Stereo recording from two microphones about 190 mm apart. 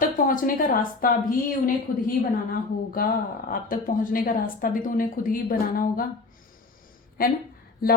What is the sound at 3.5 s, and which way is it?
A woman's voice, 50° left (ahead or behind).